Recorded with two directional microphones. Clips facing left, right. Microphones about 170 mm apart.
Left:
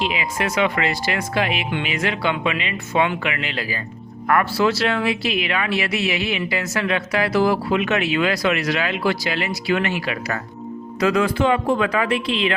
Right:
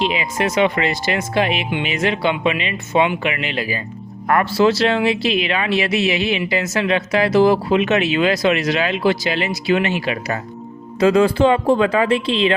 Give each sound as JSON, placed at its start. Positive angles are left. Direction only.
{"t": 0.0, "sound": "speech", "side_deg": -25}